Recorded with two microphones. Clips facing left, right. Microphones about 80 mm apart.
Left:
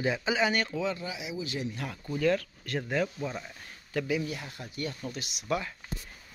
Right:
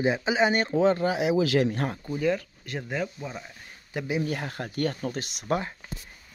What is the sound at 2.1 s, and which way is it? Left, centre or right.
Speech, centre.